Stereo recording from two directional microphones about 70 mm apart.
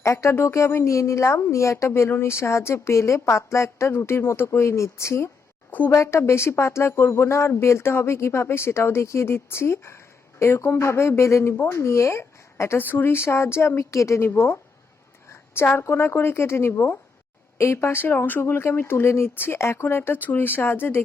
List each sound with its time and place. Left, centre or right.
0.0 s speech: left
14.3 s speech: left